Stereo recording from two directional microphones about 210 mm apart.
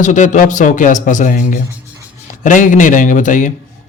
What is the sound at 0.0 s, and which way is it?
A man's voice, 35° left (ahead or behind).